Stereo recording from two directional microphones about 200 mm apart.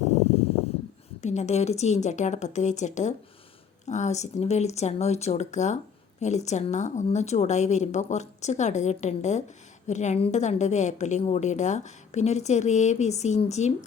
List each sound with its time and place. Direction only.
1.2 s speech: 35° left (ahead or behind)